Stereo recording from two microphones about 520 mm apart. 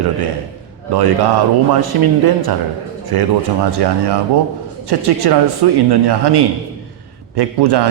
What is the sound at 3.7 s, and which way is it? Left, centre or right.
A man's voice, right.